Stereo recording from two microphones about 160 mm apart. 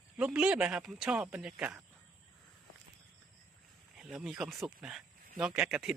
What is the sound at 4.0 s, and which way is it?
Speech, 5° right (ahead or behind).